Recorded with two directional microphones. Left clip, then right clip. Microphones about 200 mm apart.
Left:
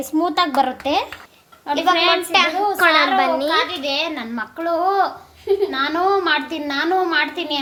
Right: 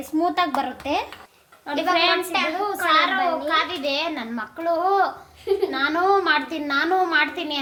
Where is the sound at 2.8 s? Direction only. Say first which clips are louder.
Left 5 dB; 55° left (ahead or behind).